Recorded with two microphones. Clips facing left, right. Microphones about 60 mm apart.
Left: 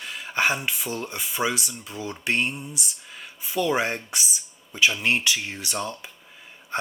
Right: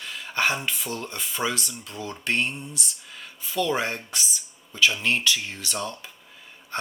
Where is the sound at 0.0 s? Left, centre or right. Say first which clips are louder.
Left 1 dB; centre.